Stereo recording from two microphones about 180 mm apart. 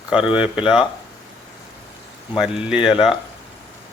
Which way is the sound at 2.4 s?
5° right (ahead or behind).